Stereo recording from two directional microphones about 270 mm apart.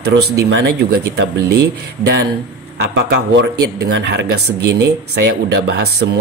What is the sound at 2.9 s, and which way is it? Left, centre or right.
Speech, right.